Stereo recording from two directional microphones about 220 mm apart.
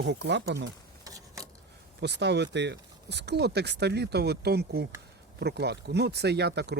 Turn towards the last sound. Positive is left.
turn(degrees=-50)  # may be behind; listen again after turning